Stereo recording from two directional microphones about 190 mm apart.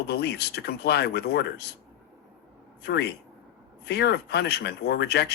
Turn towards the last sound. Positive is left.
turn(degrees=60)  # may be behind; listen again after turning